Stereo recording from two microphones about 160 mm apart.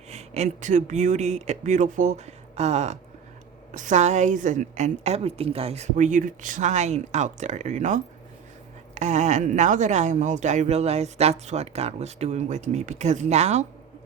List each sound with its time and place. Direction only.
0.1 s speech: 45° right (ahead or behind)